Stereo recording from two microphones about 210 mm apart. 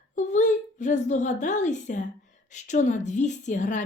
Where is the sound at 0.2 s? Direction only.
35° left (ahead or behind).